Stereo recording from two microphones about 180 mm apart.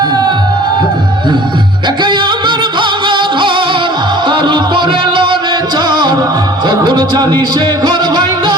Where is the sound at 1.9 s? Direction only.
25° right (ahead or behind).